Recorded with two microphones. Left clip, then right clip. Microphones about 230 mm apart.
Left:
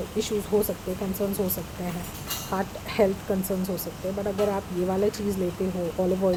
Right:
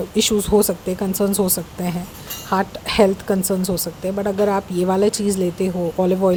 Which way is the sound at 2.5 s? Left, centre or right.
Right.